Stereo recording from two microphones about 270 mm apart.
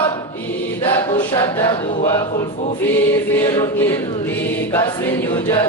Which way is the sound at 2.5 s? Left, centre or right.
Left.